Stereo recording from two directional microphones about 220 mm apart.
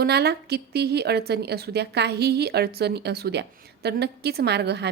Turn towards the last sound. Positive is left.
turn(degrees=-50)  # may be behind; listen again after turning